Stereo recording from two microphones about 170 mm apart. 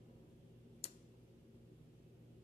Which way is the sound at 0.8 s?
35° left (ahead or behind).